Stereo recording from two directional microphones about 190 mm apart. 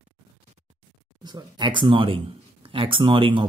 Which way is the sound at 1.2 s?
25° right (ahead or behind).